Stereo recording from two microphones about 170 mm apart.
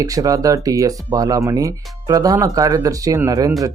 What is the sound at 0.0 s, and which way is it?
Speech, 20° right (ahead or behind).